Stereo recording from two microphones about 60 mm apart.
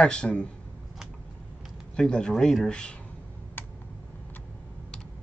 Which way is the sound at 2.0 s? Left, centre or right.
Centre.